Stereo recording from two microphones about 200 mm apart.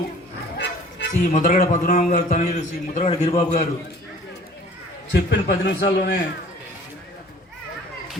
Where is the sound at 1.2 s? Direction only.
40° left (ahead or behind).